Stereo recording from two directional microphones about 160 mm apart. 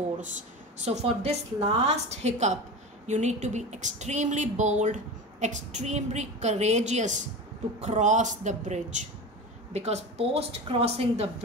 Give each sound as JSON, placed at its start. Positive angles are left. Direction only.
{"t": 0.7, "sound": "a woman's voice", "side_deg": -45}